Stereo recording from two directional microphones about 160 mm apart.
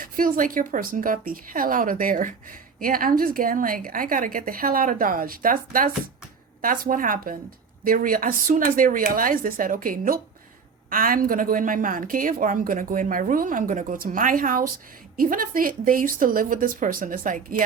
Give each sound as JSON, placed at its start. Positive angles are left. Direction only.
{"t": 0.0, "sound": "a woman's voice", "side_deg": -60}